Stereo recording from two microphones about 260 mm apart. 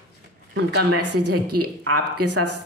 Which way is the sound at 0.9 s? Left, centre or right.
Right.